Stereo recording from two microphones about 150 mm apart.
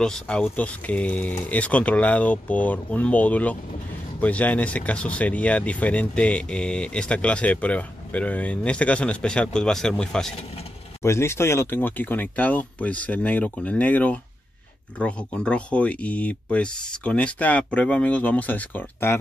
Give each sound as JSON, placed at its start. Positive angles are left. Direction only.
{"t": 0.0, "sound": "speech", "side_deg": 5}
{"t": 11.0, "sound": "speech", "side_deg": 15}